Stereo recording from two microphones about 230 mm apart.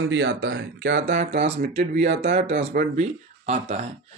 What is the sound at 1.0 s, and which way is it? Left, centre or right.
Speech, right.